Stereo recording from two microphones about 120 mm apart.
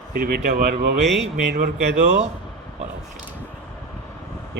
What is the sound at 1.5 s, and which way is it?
Speech, 90° right.